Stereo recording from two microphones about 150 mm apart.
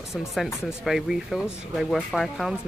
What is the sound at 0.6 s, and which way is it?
Speech, centre (ahead or behind).